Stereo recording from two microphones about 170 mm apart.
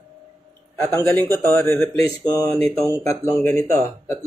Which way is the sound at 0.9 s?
15° left (ahead or behind).